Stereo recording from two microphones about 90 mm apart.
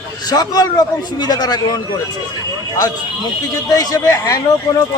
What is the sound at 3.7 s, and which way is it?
Speech, 45° left (ahead or behind).